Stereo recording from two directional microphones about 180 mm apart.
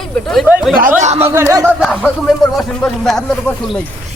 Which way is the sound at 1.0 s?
40° right (ahead or behind).